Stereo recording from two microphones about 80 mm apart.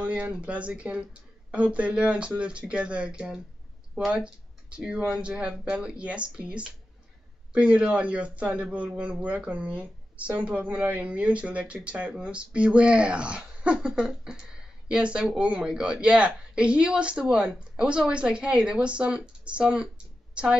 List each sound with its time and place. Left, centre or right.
0.0 s speech: centre